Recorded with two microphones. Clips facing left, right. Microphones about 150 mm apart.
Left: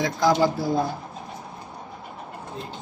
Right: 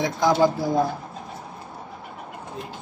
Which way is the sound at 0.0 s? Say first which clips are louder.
Right 1 dB; 20° right (ahead or behind).